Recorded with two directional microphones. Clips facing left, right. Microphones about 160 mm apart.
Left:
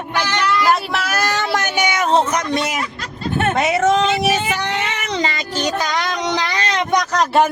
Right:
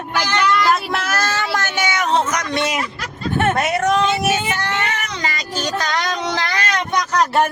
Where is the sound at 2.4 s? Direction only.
10° left (ahead or behind).